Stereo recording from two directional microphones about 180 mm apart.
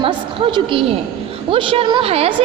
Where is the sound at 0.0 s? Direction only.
30° right (ahead or behind).